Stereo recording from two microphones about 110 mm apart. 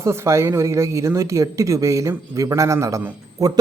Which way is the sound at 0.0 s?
25° right (ahead or behind).